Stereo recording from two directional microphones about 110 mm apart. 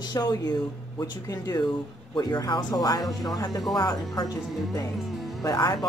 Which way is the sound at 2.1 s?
40° left (ahead or behind).